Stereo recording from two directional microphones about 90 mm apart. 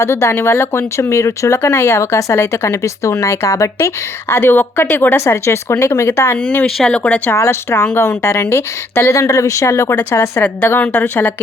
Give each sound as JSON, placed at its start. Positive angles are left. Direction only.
{"t": 0.0, "sound": "speech", "side_deg": 30}
{"t": 6.7, "sound": "speech", "side_deg": 10}
{"t": 7.3, "sound": "speech", "side_deg": 30}
{"t": 9.9, "sound": "a woman's voice", "side_deg": 20}